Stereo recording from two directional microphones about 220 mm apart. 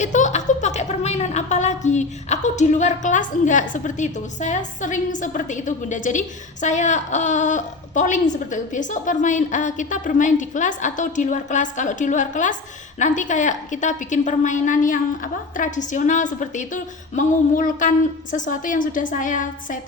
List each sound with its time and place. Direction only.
0.0 s a woman's voice: 35° left (ahead or behind)